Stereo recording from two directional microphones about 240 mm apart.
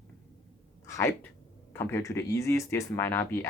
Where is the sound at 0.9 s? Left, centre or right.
Centre.